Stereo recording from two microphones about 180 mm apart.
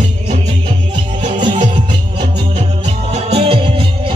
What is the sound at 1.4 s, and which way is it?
Music, 25° right (ahead or behind).